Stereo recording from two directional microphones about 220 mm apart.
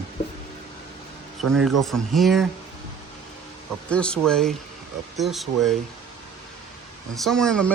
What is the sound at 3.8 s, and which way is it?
Speech, 5° left (ahead or behind).